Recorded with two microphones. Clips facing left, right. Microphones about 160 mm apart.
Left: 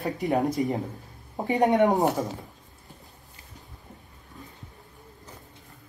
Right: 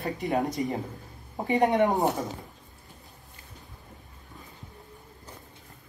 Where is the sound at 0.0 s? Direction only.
20° left (ahead or behind).